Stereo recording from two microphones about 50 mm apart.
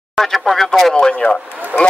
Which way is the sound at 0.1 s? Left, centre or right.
Centre.